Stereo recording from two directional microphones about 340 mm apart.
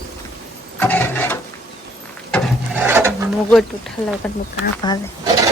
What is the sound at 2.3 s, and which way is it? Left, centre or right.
Wood, centre.